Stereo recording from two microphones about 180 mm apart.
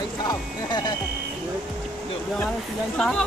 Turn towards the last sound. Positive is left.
turn(degrees=5)  # may be behind; listen again after turning